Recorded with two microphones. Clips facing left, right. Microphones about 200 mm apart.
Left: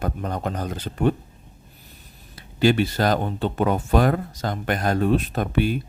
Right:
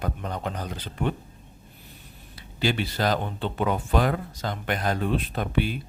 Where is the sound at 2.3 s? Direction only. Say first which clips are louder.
Left 8 dB; 45° left (ahead or behind).